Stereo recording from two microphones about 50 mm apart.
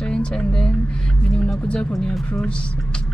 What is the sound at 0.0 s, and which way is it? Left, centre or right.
Speech, centre.